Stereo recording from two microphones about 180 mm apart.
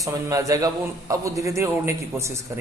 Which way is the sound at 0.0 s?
20° right (ahead or behind).